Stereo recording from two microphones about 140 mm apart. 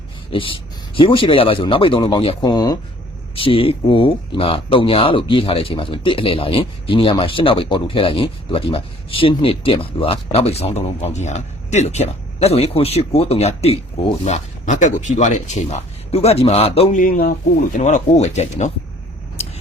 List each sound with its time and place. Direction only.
0.3 s speech: 40° left (ahead or behind)
3.3 s speech: 40° left (ahead or behind)
16.9 s speech: 75° left (ahead or behind)
17.7 s speech: 60° left (ahead or behind)
19.4 s a sound: 50° left (ahead or behind)